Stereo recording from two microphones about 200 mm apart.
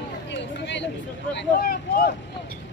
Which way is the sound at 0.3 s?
60° left (ahead or behind).